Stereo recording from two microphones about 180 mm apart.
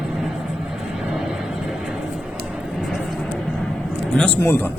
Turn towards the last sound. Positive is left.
turn(degrees=10)  # may be behind; listen again after turning